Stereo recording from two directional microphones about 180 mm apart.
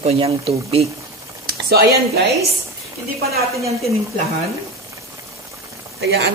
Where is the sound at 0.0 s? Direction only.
35° right (ahead or behind).